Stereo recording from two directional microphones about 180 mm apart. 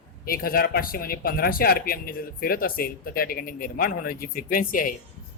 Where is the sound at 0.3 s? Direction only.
55° left (ahead or behind).